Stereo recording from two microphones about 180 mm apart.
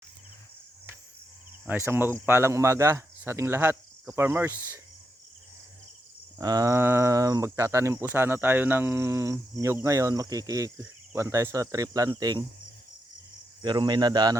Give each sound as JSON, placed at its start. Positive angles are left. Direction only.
{"t": 1.6, "sound": "speech", "side_deg": -10}
{"t": 6.4, "sound": "speech", "side_deg": -20}
{"t": 13.6, "sound": "speech", "side_deg": -25}